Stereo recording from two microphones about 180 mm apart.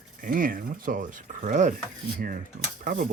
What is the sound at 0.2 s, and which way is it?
Speech, 50° right (ahead or behind).